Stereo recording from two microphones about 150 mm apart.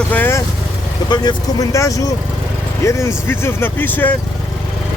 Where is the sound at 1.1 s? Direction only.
25° left (ahead or behind).